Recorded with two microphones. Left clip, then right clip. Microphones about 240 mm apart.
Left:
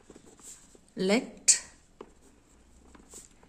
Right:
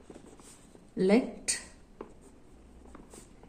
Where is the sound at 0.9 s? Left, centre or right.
Left.